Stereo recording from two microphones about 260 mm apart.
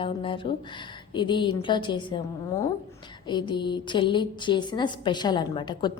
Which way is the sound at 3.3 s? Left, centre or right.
Centre.